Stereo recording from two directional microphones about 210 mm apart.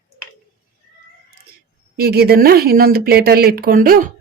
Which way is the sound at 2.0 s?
50° right (ahead or behind).